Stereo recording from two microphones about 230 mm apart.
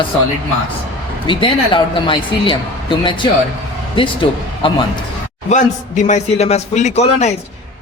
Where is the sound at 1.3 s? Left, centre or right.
Left.